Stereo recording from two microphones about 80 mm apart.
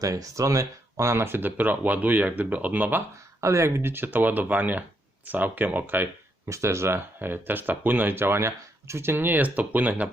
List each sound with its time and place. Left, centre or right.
0.0 s speech: right
3.4 s speech: right
6.5 s speech: right; by 10.1 s centre